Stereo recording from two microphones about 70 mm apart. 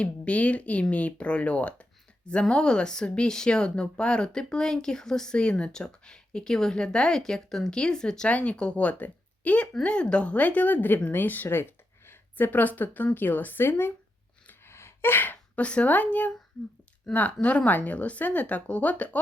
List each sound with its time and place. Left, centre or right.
0.0 s speech: centre
14.4 s gasp: left
17.1 s speech: centre